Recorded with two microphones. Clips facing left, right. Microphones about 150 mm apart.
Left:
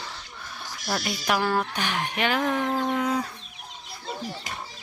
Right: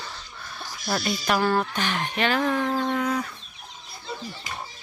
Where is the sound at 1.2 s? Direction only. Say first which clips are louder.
Right 1 dB; 10° left (ahead or behind).